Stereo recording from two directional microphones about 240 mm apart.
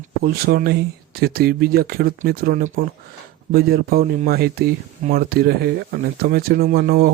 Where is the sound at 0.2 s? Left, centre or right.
Right.